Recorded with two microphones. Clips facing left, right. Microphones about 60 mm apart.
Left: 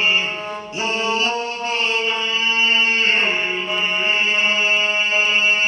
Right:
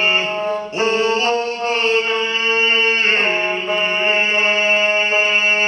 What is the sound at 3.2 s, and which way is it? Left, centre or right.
Music, right.